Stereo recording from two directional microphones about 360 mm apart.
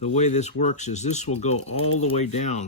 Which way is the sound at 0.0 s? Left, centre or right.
Centre.